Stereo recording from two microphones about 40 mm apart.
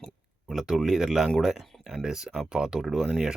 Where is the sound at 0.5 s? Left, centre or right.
Centre.